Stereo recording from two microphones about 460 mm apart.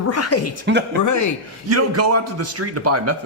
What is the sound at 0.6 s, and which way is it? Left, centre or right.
Speech, right.